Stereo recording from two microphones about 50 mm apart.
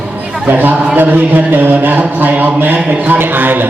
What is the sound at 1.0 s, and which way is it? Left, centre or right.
Speech, right.